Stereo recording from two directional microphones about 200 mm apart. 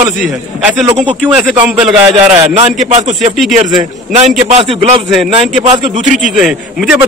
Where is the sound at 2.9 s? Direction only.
35° right (ahead or behind).